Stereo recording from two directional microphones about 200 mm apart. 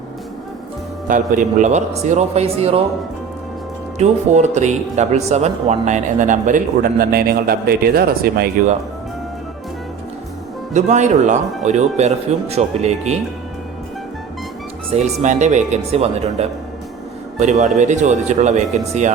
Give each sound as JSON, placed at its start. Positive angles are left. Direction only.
{"t": 1.0, "sound": "speech", "side_deg": -40}
{"t": 3.9, "sound": "a man's voice", "side_deg": -35}
{"t": 10.8, "sound": "speech", "side_deg": -35}
{"t": 15.2, "sound": "speech", "side_deg": -35}